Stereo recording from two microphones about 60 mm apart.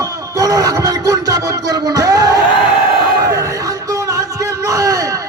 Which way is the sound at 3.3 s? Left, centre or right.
Right.